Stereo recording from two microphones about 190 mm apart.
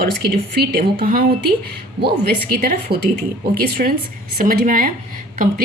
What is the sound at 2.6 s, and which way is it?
A woman's voice, 50° right (ahead or behind).